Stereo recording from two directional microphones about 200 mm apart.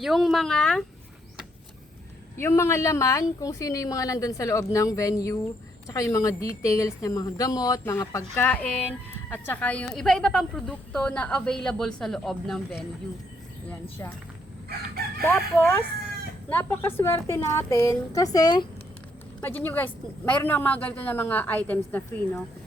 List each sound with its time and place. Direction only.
0.0 s a woman's voice: centre (ahead or behind)
2.4 s a woman's voice: 15° left (ahead or behind)
14.0 s speech: 15° left (ahead or behind)
15.2 s speech: 10° left (ahead or behind)
19.4 s speech: 10° left (ahead or behind)